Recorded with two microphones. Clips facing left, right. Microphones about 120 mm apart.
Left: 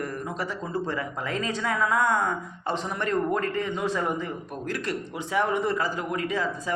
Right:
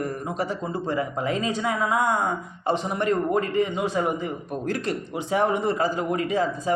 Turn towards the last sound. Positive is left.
turn(degrees=-20)  # may be behind; listen again after turning